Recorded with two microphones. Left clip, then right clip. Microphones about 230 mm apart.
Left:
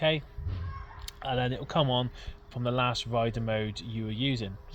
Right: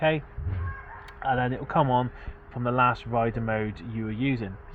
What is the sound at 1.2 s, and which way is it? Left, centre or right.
Speech, left.